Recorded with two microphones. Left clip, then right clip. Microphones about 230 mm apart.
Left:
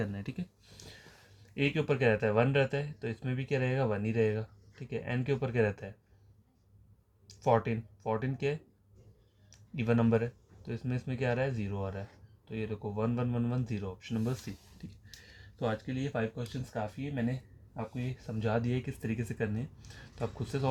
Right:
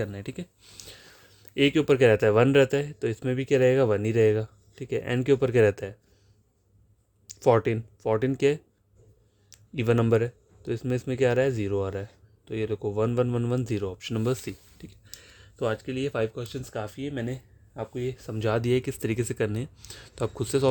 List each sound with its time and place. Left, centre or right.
0.0 s speech: right
1.5 s speech: right
7.3 s speech: right
14.8 s speech: right
17.9 s speech: right